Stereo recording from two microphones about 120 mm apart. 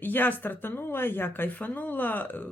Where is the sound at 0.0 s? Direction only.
15° left (ahead or behind).